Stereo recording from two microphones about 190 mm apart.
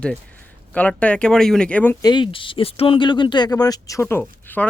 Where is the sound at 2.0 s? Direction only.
25° left (ahead or behind).